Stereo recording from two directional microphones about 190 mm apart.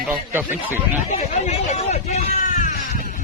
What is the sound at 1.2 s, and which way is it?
Speech, 40° left (ahead or behind).